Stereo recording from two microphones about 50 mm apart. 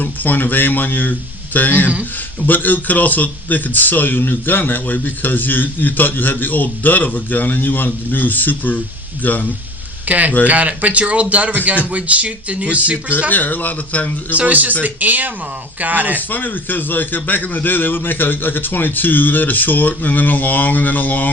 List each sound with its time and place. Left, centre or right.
0.0 s a man's voice: left
10.1 s a man's voice: right
12.6 s a man's voice: left
14.3 s speech: right
16.3 s a man's voice: left